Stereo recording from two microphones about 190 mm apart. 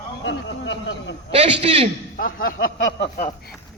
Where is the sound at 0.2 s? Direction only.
75° left (ahead or behind).